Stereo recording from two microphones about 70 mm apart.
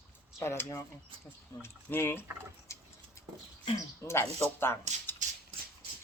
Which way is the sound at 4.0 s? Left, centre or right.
Left.